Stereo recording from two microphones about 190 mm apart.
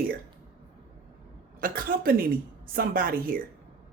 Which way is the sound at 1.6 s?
50° right (ahead or behind).